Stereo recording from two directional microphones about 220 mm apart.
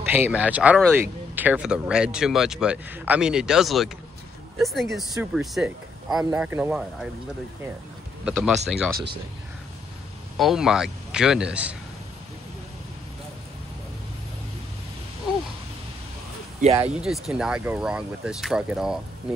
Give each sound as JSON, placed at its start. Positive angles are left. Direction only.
{"t": 0.1, "sound": "speech", "side_deg": -5}
{"t": 8.3, "sound": "speech", "side_deg": -5}
{"t": 10.3, "sound": "speech", "side_deg": 0}
{"t": 16.6, "sound": "speech", "side_deg": -30}
{"t": 17.0, "sound": "speech", "side_deg": -5}